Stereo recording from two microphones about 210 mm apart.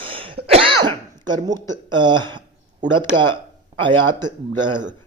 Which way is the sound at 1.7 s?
20° right (ahead or behind).